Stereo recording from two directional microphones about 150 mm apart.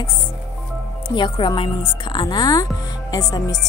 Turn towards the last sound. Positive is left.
turn(degrees=25)  # may be behind; listen again after turning